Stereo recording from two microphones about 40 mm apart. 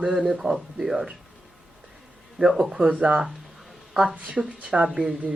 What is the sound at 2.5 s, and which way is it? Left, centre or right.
Speech, centre.